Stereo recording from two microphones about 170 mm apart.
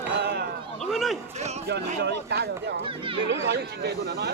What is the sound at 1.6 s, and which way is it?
Speech, 80° right.